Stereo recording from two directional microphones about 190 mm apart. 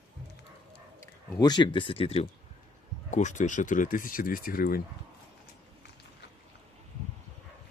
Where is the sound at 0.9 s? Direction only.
15° left (ahead or behind); by 4.8 s 50° left (ahead or behind).